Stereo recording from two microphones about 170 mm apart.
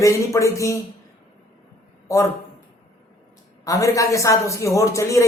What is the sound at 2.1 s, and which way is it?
Speech, 20° left (ahead or behind).